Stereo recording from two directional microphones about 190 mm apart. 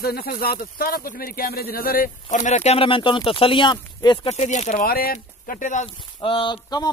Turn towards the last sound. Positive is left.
turn(degrees=25)  # may be behind; listen again after turning